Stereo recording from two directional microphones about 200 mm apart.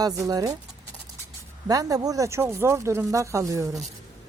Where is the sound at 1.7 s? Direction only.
15° right (ahead or behind).